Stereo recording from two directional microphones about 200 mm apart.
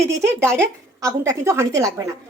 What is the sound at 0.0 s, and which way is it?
A woman's voice, 15° right (ahead or behind).